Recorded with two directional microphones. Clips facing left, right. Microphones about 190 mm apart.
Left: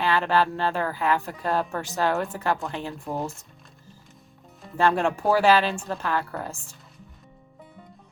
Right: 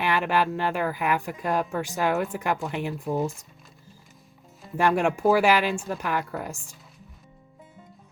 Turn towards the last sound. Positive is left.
turn(degrees=-15)  # may be behind; listen again after turning